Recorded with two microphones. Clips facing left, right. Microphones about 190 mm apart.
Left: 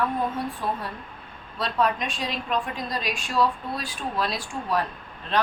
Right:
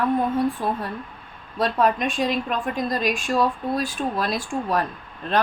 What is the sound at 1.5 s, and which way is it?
A woman's voice, 50° right (ahead or behind).